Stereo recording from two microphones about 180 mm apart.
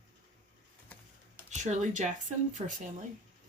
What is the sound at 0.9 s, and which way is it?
Typing, 10° left (ahead or behind).